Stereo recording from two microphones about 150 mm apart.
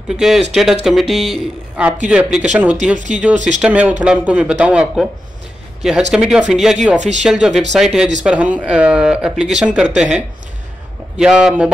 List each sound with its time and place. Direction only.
0.1 s a man's voice: 5° right (ahead or behind)
3.3 s speech: 55° right (ahead or behind)
3.6 s a man's voice: 10° right (ahead or behind)
7.0 s speech: 50° right (ahead or behind)
7.2 s a man's voice: 5° right (ahead or behind)